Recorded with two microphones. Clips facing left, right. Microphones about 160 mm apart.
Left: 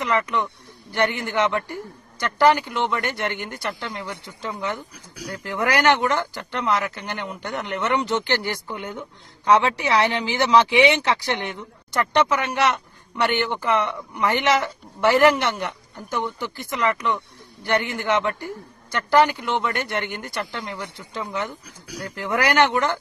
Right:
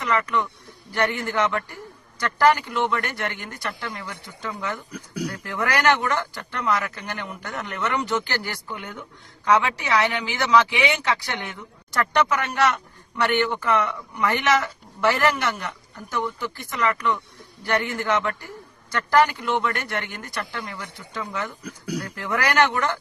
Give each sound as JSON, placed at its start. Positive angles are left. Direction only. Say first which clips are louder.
{"t": 0.0, "sound": "a man's voice", "louder": "left 1 dB", "side_deg": 20}
{"t": 4.9, "sound": "speech", "louder": "right 8 dB", "side_deg": -60}
{"t": 5.3, "sound": "speech", "louder": "left 5 dB", "side_deg": 25}
{"t": 21.6, "sound": "speech", "louder": "right 8 dB", "side_deg": -60}
{"t": 22.0, "sound": "speech", "louder": "left 5 dB", "side_deg": 25}